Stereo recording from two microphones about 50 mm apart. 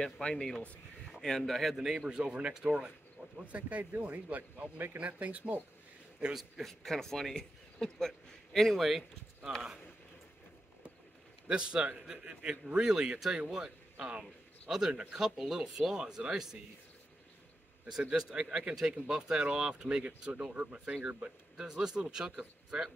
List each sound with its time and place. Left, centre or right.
0.0 s speech: centre
1.2 s a man's voice: centre
2.0 s a man's voice: centre
2.6 s a man's voice: right
6.3 s a man's voice: centre
6.7 s a man's voice: centre
11.4 s a man's voice: centre
15.2 s speech: centre
18.1 s a man's voice: centre
21.5 s speech: centre